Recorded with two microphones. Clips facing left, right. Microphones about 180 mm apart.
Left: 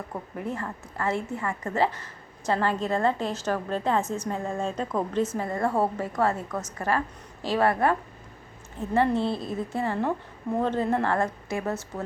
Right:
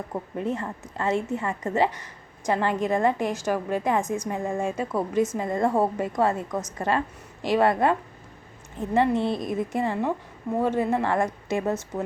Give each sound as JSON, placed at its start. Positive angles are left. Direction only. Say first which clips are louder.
{"t": 0.3, "sound": "a woman's voice", "louder": "right 4 dB", "side_deg": -20}